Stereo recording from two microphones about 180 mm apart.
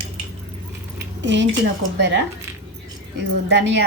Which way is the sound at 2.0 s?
75° right (ahead or behind).